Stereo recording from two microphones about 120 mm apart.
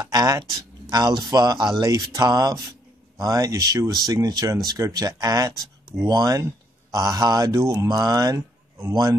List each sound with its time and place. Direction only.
0.0 s speech: 30° right (ahead or behind)